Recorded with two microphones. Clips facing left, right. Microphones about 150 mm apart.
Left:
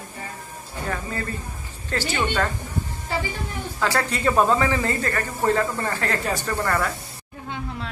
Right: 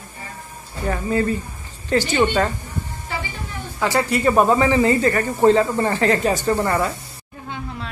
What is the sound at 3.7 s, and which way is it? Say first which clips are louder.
A man's voice: right 4 dB; 15° right (ahead or behind).